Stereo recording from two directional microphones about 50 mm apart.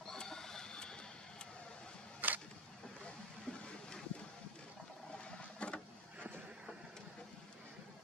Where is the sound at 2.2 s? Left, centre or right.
Right.